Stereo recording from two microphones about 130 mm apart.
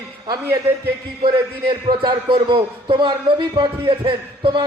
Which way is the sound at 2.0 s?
40° right (ahead or behind).